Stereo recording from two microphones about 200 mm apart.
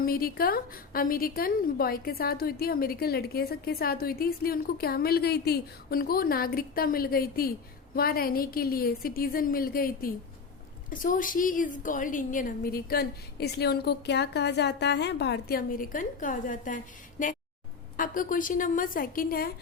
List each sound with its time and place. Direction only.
0.0 s a woman's voice: 50° left (ahead or behind)